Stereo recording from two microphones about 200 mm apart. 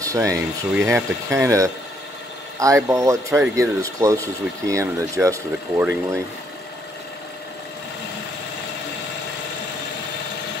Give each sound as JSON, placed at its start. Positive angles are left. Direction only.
{"t": 0.0, "sound": "speech", "side_deg": -15}